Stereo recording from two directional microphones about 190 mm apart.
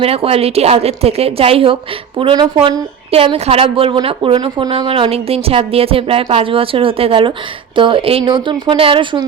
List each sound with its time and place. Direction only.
0.0 s a woman's voice: 30° right (ahead or behind)